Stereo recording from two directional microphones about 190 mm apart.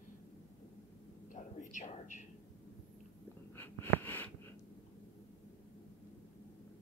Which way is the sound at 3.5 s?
10° left (ahead or behind).